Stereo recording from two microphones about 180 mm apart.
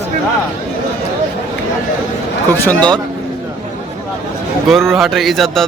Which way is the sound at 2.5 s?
10° left (ahead or behind).